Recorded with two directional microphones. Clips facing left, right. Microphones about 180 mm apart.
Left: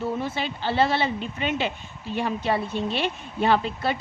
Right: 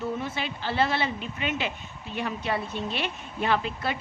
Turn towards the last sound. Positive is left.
turn(degrees=30)  # may be behind; listen again after turning